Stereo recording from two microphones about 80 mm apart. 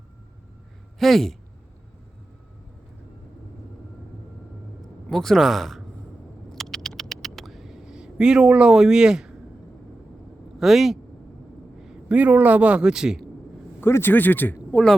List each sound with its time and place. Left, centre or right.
0.9 s speech: centre
5.1 s speech: centre
6.5 s a sound: centre
10.6 s speech: centre
11.8 s a sound: centre
12.1 s a man's voice: centre
13.8 s speech: left